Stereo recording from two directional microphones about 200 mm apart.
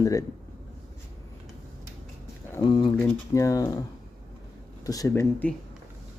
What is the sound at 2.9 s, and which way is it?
Speech, 10° left (ahead or behind).